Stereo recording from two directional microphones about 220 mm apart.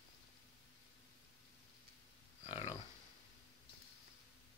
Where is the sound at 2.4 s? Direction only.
25° left (ahead or behind).